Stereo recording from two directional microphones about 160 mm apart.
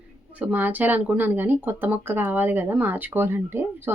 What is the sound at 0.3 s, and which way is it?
Speech, 10° right (ahead or behind).